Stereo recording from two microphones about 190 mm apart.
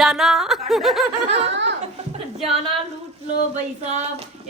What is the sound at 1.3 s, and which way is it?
Speech, 65° right (ahead or behind).